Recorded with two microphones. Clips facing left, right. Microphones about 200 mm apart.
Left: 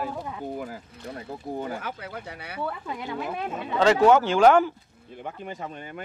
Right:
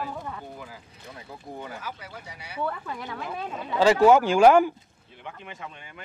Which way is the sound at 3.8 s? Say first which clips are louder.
Right 1 dB; 10° right (ahead or behind).